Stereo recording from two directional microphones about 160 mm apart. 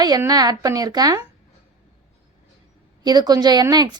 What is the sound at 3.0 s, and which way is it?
Speech, 25° right (ahead or behind).